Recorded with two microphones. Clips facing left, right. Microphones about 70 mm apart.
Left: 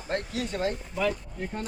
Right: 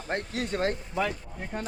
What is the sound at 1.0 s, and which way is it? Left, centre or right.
Speech, right.